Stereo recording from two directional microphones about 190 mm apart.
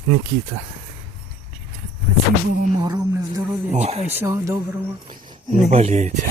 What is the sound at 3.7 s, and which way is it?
Speech, 35° right (ahead or behind).